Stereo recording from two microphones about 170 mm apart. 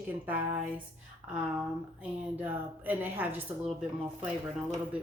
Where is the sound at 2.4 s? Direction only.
10° right (ahead or behind).